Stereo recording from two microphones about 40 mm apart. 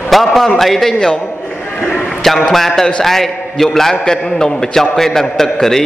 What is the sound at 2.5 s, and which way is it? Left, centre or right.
A man's voice, centre.